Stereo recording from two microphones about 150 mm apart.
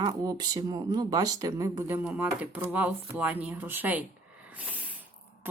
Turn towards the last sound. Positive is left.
turn(degrees=-10)  # may be behind; listen again after turning